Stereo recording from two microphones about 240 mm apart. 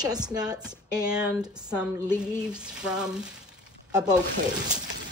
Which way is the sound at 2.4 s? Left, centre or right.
Centre.